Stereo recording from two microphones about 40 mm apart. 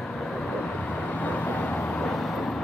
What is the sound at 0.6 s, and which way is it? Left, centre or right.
Vehicle, left.